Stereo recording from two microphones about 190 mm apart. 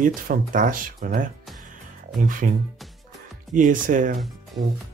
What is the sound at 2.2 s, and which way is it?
Speech, 45° right (ahead or behind).